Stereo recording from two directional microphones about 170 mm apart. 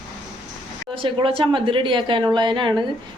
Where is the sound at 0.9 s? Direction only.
30° right (ahead or behind).